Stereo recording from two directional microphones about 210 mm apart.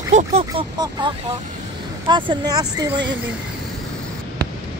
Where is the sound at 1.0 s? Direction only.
25° right (ahead or behind).